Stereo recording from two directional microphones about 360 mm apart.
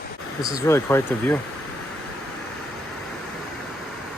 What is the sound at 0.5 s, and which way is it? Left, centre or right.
Speech, centre.